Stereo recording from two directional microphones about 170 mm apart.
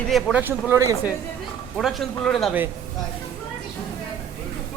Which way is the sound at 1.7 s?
Centre (ahead or behind).